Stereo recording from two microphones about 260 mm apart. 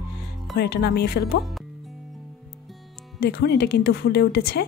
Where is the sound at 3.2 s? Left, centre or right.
Left.